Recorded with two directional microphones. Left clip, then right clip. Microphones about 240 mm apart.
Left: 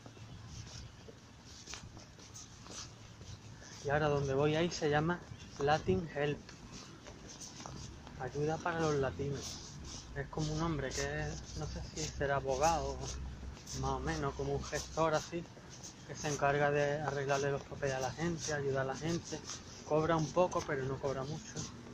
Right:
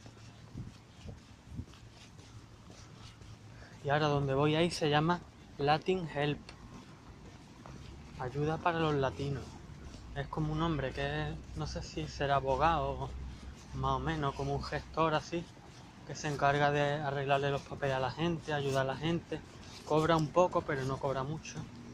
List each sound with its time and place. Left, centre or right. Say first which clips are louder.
3.8 s speech: right 2 dB; right
8.2 s speech: right 2 dB; right
10.1 s speech: right 3 dB; right
13.8 s speech: right 4 dB; right